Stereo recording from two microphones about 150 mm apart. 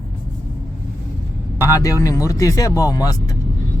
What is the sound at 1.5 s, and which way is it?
Speech, 20° left (ahead or behind).